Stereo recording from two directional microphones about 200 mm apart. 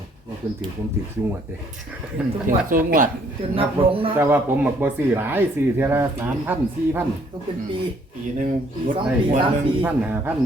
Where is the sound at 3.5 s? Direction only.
25° right (ahead or behind).